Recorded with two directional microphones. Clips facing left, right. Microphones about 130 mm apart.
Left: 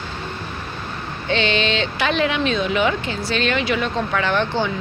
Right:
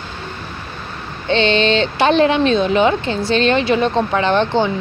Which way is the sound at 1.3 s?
30° right (ahead or behind).